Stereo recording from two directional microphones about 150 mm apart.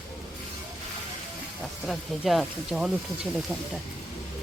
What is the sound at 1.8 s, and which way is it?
Speech, centre (ahead or behind).